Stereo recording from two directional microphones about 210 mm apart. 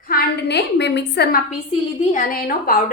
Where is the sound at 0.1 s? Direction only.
50° left (ahead or behind).